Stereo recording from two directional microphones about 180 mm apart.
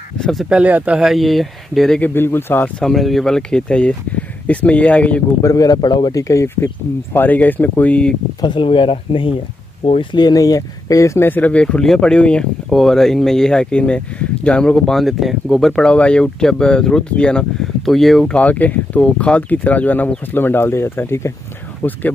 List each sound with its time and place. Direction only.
0.2 s speech: centre (ahead or behind)
5.4 s speech: 20° left (ahead or behind)
8.4 s speech: 25° left (ahead or behind)